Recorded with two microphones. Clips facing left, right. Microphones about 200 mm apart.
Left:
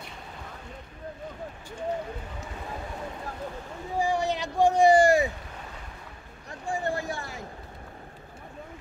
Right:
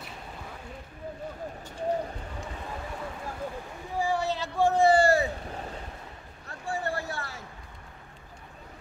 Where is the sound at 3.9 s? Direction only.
15° left (ahead or behind).